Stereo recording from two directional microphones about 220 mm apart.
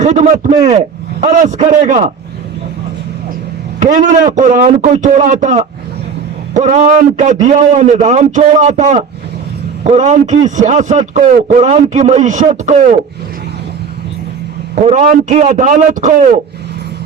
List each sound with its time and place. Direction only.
0.0 s a man's voice: 30° right (ahead or behind)
3.8 s a man's voice: 35° right (ahead or behind)
14.8 s a man's voice: 35° right (ahead or behind)